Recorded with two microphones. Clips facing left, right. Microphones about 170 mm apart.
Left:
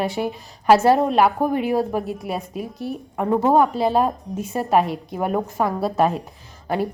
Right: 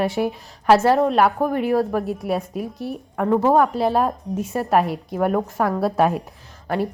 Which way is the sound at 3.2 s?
15° left (ahead or behind).